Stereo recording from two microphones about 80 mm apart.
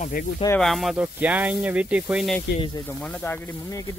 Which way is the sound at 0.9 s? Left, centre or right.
Centre.